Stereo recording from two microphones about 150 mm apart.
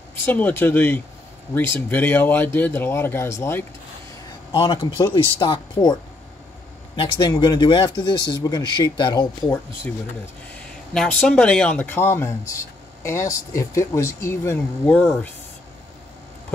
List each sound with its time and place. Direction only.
0.1 s speech: 10° left (ahead or behind)
4.5 s speech: 30° left (ahead or behind)
7.0 s speech: 30° left (ahead or behind)
10.9 s speech: 5° left (ahead or behind)